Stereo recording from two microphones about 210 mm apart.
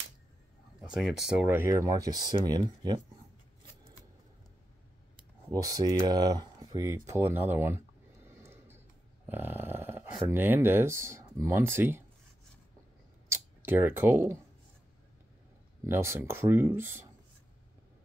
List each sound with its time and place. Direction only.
0.9 s speech: centre (ahead or behind); by 3.0 s 20° right (ahead or behind)
5.5 s speech: 15° right (ahead or behind)
8.3 s a sound: 10° right (ahead or behind)
9.3 s speech: 10° right (ahead or behind)
13.3 s speech: 10° right (ahead or behind)
15.8 s speech: 10° right (ahead or behind)